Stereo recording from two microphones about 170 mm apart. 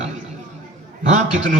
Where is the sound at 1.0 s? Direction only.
45° right (ahead or behind).